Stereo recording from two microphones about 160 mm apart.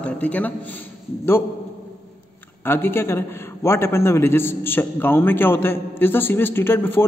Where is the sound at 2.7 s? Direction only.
15° left (ahead or behind).